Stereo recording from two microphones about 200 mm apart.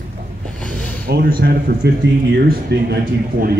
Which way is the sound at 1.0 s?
50° right (ahead or behind).